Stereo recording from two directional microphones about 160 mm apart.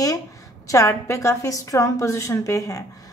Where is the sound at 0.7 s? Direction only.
20° left (ahead or behind).